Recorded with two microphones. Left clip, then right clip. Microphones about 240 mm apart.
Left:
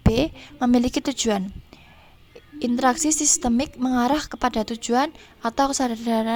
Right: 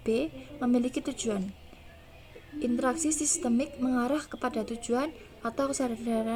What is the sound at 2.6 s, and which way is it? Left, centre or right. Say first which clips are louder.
A woman's voice: left 8 dB; left.